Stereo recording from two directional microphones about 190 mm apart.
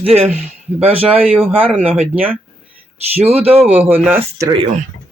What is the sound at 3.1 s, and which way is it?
Speech, 30° right (ahead or behind).